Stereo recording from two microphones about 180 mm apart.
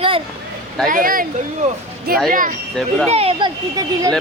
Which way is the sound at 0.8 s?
50° right (ahead or behind).